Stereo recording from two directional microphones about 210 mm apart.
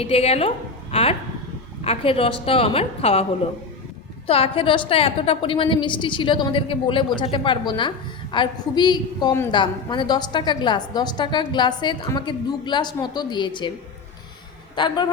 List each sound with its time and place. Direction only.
0.0 s a woman's voice: 30° left (ahead or behind)
4.3 s a woman's voice: 25° left (ahead or behind)
14.8 s a woman's voice: 20° left (ahead or behind)